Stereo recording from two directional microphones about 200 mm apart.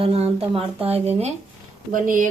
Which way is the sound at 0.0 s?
30° right (ahead or behind).